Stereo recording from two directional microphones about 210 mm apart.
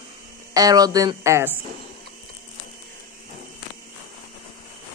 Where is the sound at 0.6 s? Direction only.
20° right (ahead or behind).